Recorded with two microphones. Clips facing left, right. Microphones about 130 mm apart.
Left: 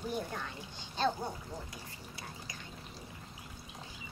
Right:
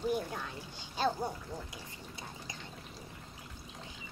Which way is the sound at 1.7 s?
20° right (ahead or behind).